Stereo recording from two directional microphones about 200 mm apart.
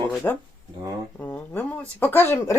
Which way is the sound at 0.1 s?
5° left (ahead or behind).